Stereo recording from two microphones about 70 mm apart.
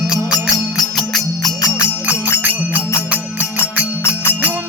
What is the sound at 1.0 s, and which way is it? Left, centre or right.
Music, centre.